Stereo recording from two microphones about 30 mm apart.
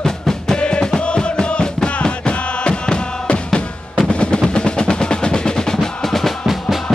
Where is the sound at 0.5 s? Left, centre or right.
Left.